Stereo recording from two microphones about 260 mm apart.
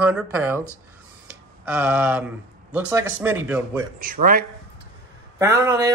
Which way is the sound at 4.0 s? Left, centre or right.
Right.